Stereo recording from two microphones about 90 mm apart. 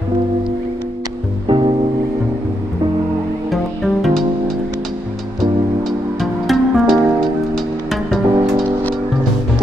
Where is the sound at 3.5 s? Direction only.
Centre (ahead or behind).